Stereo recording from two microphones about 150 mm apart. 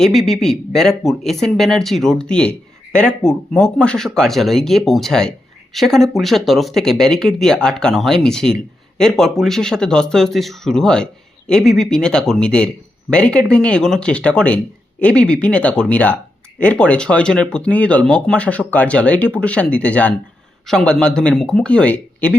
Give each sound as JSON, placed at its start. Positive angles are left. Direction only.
{"t": 0.0, "sound": "speech", "side_deg": 0}